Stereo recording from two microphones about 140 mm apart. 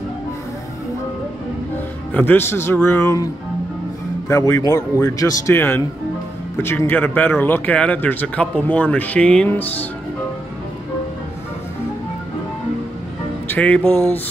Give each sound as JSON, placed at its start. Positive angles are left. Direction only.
{"t": 2.1, "sound": "speech", "side_deg": 15}
{"t": 4.3, "sound": "a man's voice", "side_deg": 25}
{"t": 13.5, "sound": "music", "side_deg": 10}